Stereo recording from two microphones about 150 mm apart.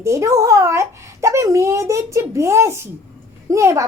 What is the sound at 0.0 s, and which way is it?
A child's voice, 20° right (ahead or behind).